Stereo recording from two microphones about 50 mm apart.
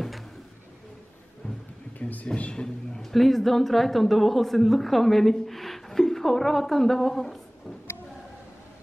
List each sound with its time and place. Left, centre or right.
2.0 s a sound: left
2.3 s a man's voice: left
2.6 s speech: centre